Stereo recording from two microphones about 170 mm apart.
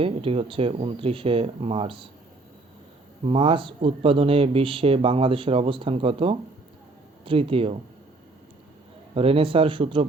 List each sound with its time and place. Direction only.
0.0 s speech: 35° right (ahead or behind)
3.2 s speech: 30° right (ahead or behind)
9.1 s speech: 35° right (ahead or behind)